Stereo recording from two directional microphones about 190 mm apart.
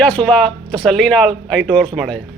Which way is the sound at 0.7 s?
5° left (ahead or behind).